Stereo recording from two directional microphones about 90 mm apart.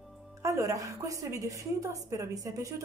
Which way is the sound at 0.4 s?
35° right (ahead or behind).